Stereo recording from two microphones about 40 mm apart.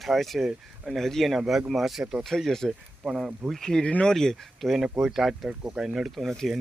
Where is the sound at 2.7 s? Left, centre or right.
Centre.